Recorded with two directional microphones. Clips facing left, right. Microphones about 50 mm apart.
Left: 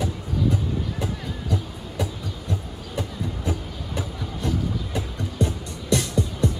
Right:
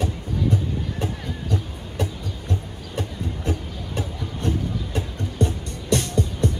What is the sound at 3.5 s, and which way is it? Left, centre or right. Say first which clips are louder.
Music: right 1 dB; right.